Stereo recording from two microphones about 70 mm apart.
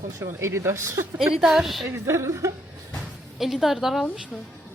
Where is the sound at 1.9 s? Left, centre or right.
Right.